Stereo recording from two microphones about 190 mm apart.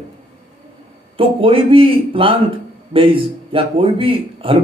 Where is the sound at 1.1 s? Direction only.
30° right (ahead or behind).